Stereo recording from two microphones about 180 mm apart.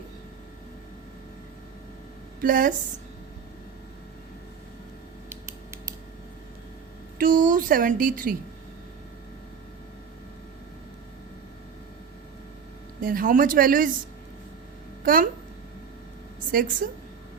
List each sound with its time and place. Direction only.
2.4 s speech: 50° right (ahead or behind)
5.3 s typing: 15° right (ahead or behind)
7.2 s speech: 45° right (ahead or behind)
13.0 s speech: 50° right (ahead or behind)
15.0 s a woman's voice: 50° right (ahead or behind)
16.5 s speech: 50° right (ahead or behind)